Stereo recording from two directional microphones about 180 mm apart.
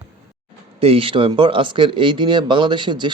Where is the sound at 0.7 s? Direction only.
30° right (ahead or behind).